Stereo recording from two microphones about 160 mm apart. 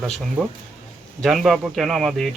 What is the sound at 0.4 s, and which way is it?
Speech, 10° right (ahead or behind).